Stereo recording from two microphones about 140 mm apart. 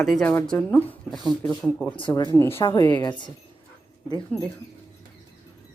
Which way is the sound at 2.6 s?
35° left (ahead or behind).